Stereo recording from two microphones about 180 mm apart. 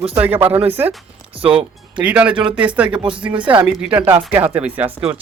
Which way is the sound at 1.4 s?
30° right (ahead or behind).